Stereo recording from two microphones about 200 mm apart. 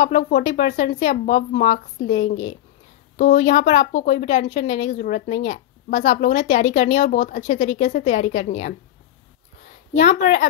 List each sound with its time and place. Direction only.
0.0 s speech: 40° left (ahead or behind)
9.9 s speech: 40° left (ahead or behind)